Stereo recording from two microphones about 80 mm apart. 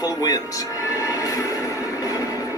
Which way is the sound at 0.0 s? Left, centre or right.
Left.